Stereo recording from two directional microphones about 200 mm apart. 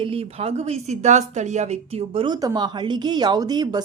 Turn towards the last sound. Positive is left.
turn(degrees=-20)  # may be behind; listen again after turning